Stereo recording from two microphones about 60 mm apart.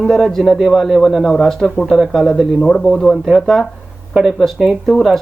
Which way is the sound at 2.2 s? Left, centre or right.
Centre.